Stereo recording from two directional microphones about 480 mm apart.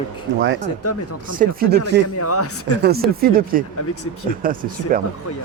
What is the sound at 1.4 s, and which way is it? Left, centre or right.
Speech, centre.